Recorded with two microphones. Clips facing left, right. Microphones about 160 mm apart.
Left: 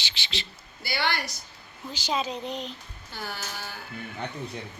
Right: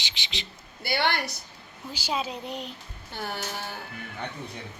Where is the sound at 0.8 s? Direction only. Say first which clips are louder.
Right 3 dB; 55° right (ahead or behind).